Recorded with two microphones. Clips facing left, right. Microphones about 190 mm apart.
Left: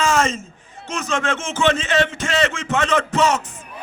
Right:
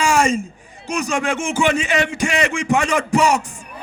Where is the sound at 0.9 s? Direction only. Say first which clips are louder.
Right 2 dB; 15° right (ahead or behind).